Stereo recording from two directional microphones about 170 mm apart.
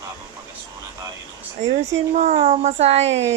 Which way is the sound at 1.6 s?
40° right (ahead or behind).